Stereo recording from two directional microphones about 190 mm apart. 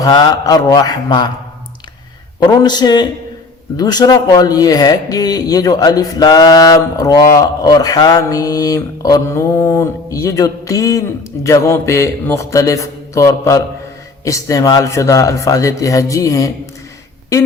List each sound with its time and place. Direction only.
0.0 s speech: 20° left (ahead or behind)
2.4 s a man's voice: 20° left (ahead or behind)